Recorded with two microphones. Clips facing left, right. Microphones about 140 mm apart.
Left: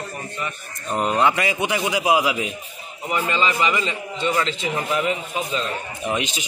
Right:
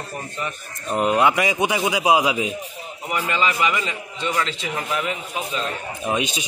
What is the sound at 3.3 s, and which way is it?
Speech, 5° right (ahead or behind).